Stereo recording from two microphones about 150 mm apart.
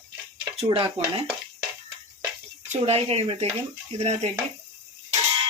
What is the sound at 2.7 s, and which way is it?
Speech, 45° right (ahead or behind).